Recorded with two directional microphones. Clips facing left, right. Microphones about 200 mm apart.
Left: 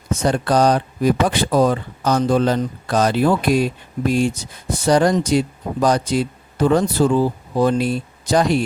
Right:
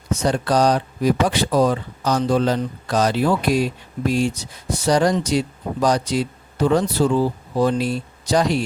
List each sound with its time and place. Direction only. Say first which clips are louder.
0.1 s speech: left 2 dB; 55° left (ahead or behind)